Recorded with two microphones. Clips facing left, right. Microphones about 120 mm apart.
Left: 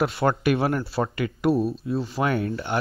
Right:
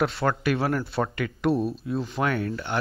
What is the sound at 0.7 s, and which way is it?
Speech, 5° left (ahead or behind).